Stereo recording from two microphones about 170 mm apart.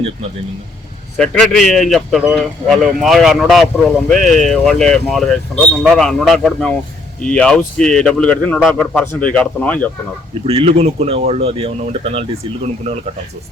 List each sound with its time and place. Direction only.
1.1 s speech: 5° left (ahead or behind)
10.4 s speech: 35° right (ahead or behind)